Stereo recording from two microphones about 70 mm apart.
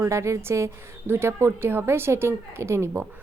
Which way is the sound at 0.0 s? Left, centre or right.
Right.